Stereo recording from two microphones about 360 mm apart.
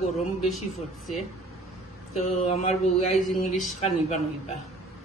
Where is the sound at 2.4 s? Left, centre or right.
Centre.